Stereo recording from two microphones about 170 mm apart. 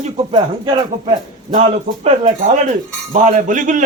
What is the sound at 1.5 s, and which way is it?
A man's voice, 40° right (ahead or behind).